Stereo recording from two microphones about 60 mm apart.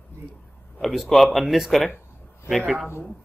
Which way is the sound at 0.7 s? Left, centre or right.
Centre.